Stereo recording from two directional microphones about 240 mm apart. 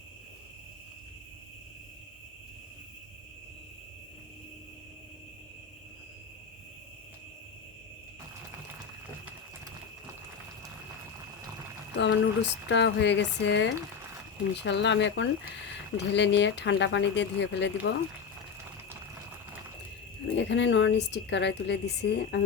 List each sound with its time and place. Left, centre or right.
11.9 s a woman's voice: left
20.2 s a woman's voice: left